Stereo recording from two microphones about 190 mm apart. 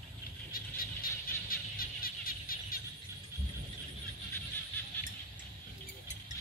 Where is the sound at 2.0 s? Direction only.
50° left (ahead or behind).